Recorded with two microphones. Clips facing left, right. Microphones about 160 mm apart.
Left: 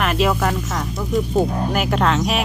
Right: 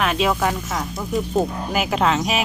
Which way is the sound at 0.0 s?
Centre (ahead or behind).